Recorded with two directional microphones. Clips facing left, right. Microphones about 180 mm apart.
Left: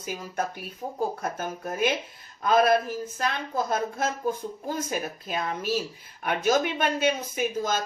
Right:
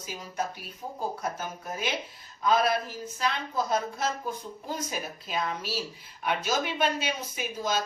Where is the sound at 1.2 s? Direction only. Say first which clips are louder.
Left 3 dB; 55° left (ahead or behind).